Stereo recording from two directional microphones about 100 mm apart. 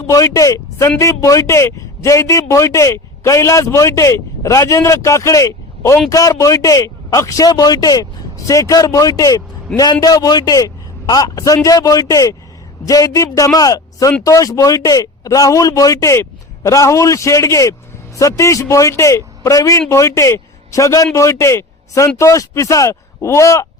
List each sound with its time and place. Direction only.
0.1 s a man's voice: 35° left (ahead or behind)